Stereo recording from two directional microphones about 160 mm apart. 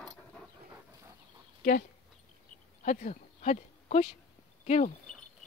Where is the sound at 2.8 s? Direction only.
50° left (ahead or behind).